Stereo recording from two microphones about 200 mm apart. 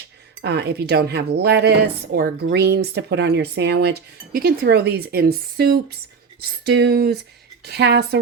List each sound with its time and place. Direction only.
0.4 s a woman's voice: 55° right (ahead or behind)